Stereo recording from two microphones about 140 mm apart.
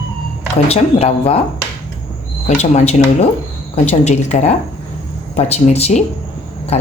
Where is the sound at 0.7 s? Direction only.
45° left (ahead or behind).